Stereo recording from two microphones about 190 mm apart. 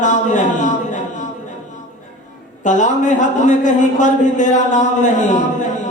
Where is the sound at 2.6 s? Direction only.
40° left (ahead or behind).